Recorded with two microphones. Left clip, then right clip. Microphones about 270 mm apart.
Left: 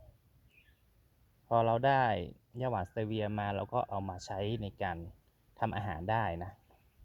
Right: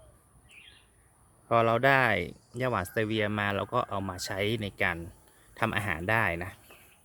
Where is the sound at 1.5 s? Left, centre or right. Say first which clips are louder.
Right 5 dB; centre.